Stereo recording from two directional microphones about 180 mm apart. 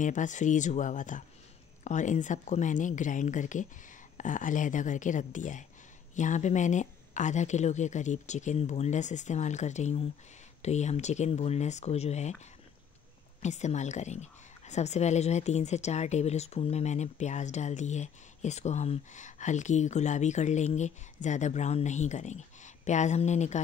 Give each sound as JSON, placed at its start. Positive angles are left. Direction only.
{"t": 0.0, "sound": "a woman's voice", "side_deg": 45}
{"t": 13.4, "sound": "a woman's voice", "side_deg": 40}